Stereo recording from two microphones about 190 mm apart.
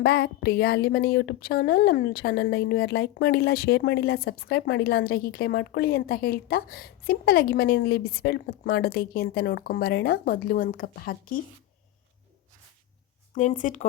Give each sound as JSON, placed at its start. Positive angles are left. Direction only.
{"t": 0.0, "sound": "a woman's voice", "side_deg": 55}
{"t": 13.3, "sound": "speech", "side_deg": 40}